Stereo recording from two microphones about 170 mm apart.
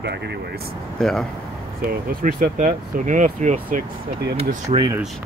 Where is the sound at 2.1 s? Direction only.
55° right (ahead or behind).